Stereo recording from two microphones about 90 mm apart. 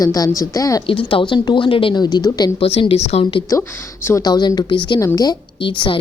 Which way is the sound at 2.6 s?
80° left.